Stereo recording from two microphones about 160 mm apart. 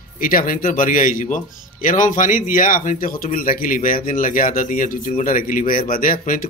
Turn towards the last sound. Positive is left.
turn(degrees=60)  # may be behind; listen again after turning